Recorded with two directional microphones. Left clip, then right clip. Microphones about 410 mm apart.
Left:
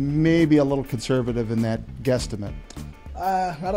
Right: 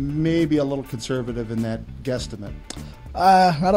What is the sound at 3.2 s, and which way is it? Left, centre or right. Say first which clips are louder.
Speech: right 9 dB; right.